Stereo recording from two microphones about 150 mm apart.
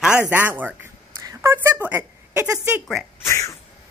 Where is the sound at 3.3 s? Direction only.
20° left (ahead or behind).